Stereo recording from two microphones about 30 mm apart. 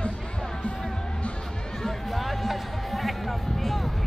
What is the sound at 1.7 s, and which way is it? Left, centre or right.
Music, centre.